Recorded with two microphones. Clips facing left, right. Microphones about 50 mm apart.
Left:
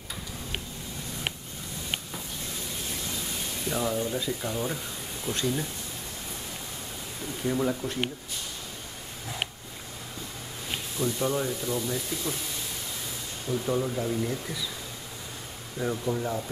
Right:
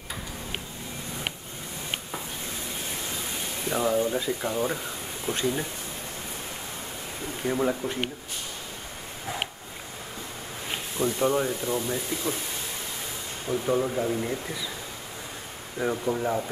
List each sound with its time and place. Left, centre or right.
3.6 s speech: centre
7.4 s speech: centre
11.0 s speech: right
13.5 s speech: centre
15.8 s speech: centre